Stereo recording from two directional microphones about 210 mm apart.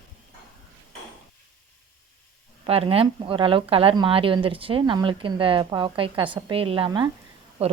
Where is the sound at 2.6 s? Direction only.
25° right (ahead or behind).